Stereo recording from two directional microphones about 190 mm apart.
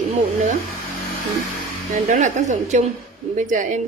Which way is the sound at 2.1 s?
40° right (ahead or behind).